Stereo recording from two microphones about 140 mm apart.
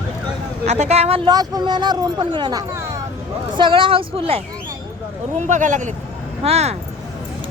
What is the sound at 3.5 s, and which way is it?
Speech, 35° right (ahead or behind).